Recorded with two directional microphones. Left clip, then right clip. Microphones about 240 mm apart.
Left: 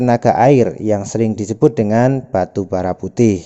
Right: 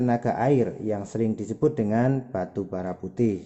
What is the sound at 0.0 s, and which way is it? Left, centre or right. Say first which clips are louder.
A man's voice: left 12 dB; left.